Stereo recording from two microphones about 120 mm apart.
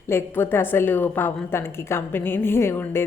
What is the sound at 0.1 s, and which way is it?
A woman's voice, 20° left (ahead or behind).